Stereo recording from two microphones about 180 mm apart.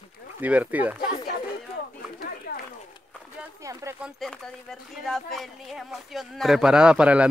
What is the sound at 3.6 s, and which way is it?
Speech, 15° right (ahead or behind).